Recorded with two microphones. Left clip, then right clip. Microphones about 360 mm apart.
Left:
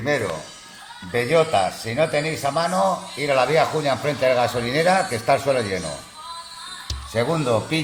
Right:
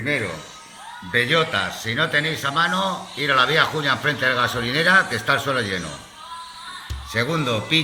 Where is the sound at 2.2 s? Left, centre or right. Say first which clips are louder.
Right 1 dB; centre.